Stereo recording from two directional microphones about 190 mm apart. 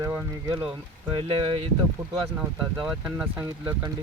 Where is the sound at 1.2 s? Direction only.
30° right (ahead or behind).